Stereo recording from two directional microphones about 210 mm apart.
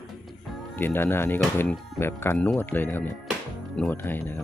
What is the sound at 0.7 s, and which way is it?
Speech, 10° left (ahead or behind).